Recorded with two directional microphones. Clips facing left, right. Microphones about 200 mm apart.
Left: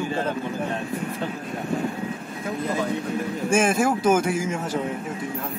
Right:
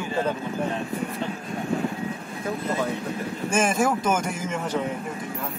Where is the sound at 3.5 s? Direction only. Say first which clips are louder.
Left 2 dB; 5° left (ahead or behind).